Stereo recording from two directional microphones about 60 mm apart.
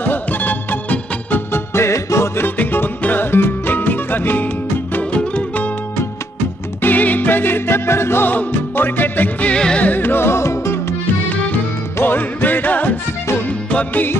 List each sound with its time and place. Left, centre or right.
0.0 s music: left
1.7 s music: left
2.4 s music: left
5.1 s music: left
6.8 s music: left
9.5 s music: centre
9.8 s music: left
11.2 s music: left